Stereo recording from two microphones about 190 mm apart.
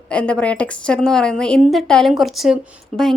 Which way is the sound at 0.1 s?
5° left (ahead or behind).